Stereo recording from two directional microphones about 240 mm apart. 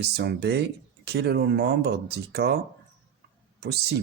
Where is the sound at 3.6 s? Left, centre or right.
Right.